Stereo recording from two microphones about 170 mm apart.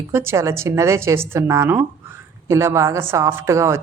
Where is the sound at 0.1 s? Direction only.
15° right (ahead or behind).